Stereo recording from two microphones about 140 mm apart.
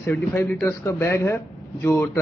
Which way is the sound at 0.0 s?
15° left (ahead or behind).